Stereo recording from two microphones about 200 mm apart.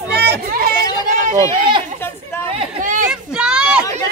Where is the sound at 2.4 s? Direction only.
35° right (ahead or behind).